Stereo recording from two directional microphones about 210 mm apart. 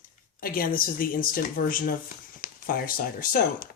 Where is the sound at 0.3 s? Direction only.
45° left (ahead or behind).